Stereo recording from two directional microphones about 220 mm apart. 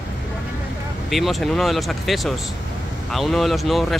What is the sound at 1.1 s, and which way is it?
Speech, centre (ahead or behind).